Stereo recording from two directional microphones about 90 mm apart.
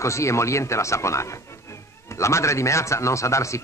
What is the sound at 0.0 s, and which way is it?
A man's voice, 35° left (ahead or behind).